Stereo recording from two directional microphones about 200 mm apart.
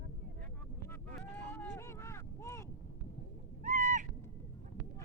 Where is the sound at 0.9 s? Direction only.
10° left (ahead or behind).